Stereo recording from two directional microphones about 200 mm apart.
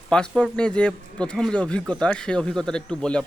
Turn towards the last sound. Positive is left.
turn(degrees=5)  # may be behind; listen again after turning